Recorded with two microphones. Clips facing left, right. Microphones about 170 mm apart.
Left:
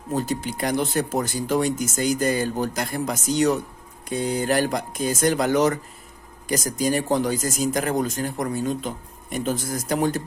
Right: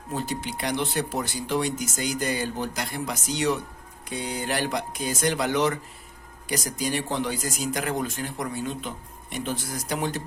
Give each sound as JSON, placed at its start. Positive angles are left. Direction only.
{"t": 0.1, "sound": "speech", "side_deg": 45}